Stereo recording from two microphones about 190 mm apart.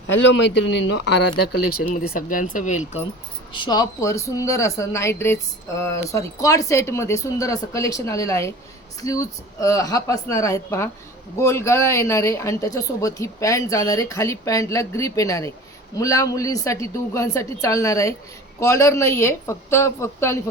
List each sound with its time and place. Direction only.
0.1 s speech: 75° left (ahead or behind)
1.4 s speech: 50° left (ahead or behind)
3.5 s speech: 25° left (ahead or behind)